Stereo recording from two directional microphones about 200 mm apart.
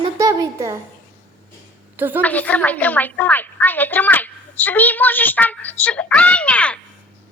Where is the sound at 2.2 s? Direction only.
5° left (ahead or behind).